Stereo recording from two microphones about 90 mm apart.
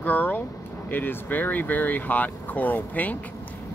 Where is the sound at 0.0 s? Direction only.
20° left (ahead or behind).